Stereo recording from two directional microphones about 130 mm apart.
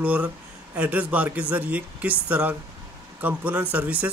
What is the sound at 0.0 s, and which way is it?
A man's voice, 10° right (ahead or behind).